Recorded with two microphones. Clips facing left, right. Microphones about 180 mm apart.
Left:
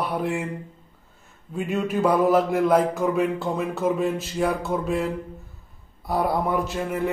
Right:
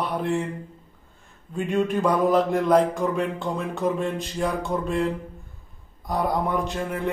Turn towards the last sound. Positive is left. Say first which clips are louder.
# left 2 dB
turn(degrees=5)  # may be behind; listen again after turning